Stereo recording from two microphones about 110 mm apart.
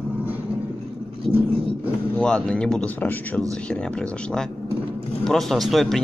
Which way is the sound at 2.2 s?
10° left (ahead or behind).